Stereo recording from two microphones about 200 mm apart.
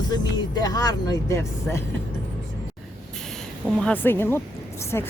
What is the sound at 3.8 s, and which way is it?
Speech, 10° left (ahead or behind).